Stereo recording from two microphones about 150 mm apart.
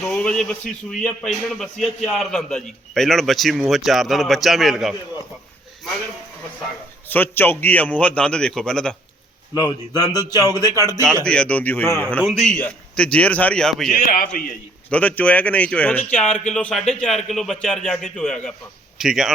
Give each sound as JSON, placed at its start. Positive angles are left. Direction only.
{"t": 0.1, "sound": "a man's voice", "side_deg": 5}
{"t": 7.1, "sound": "a man's voice", "side_deg": 15}
{"t": 9.6, "sound": "a man's voice", "side_deg": 25}
{"t": 10.3, "sound": "speech", "side_deg": -20}
{"t": 11.2, "sound": "a man's voice", "side_deg": 5}
{"t": 13.9, "sound": "a man's voice", "side_deg": 70}
{"t": 14.8, "sound": "a man's voice", "side_deg": 10}